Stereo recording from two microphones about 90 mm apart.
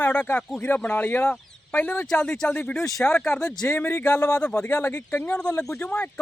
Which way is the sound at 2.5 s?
25° left (ahead or behind).